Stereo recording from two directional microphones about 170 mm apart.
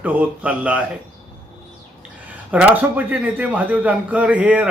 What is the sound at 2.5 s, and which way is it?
Speech, 10° right (ahead or behind).